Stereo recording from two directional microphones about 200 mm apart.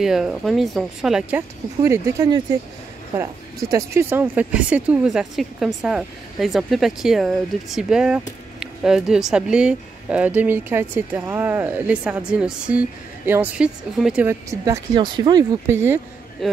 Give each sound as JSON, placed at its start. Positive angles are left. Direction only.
{"t": 0.0, "sound": "speech", "side_deg": 0}
{"t": 1.8, "sound": "speech", "side_deg": -15}